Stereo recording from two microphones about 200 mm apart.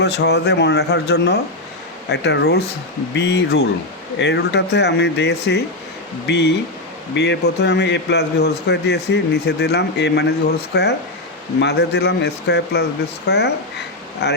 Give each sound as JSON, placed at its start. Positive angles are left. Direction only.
{"t": 0.0, "sound": "a man's voice", "side_deg": 60}